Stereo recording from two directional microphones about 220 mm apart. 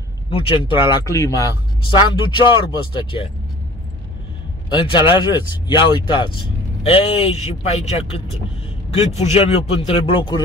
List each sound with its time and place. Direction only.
0.3 s speech: 25° left (ahead or behind)
4.6 s speech: 20° left (ahead or behind)